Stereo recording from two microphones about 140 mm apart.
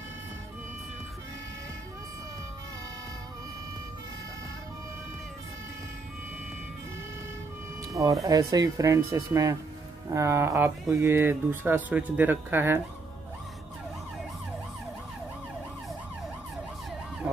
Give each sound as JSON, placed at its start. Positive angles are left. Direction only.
{"t": 7.9, "sound": "speech", "side_deg": -25}